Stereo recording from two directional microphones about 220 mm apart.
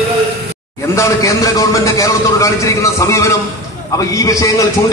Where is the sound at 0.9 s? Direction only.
15° left (ahead or behind).